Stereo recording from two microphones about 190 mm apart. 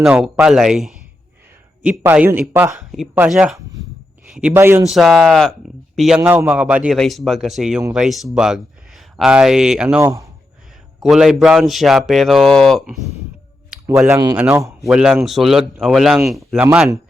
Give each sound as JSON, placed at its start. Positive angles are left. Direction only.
{"t": 0.0, "sound": "a man's voice", "side_deg": 0}
{"t": 2.7, "sound": "a man's voice", "side_deg": 0}
{"t": 4.9, "sound": "speech", "side_deg": 0}
{"t": 14.1, "sound": "a man's voice", "side_deg": -20}
{"t": 14.3, "sound": "speech", "side_deg": -5}